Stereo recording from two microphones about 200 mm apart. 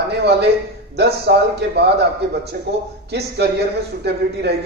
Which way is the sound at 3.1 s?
55° right (ahead or behind).